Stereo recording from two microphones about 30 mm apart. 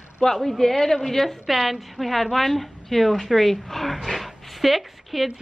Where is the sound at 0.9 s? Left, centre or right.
Centre.